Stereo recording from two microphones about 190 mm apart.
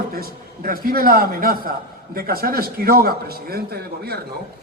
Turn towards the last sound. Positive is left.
turn(degrees=-55)  # may be behind; listen again after turning